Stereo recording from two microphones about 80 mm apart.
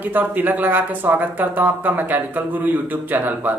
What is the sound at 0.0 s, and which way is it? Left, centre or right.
Speech, right.